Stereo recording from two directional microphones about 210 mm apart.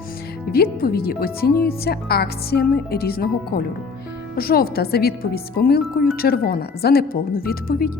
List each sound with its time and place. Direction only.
0.5 s speech: 45° left (ahead or behind)